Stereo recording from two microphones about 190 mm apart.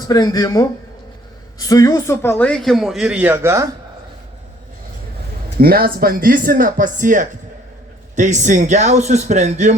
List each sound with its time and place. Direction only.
0.1 s speech: 20° left (ahead or behind); by 3.7 s 15° right (ahead or behind)
5.5 s a man's voice: 50° right (ahead or behind)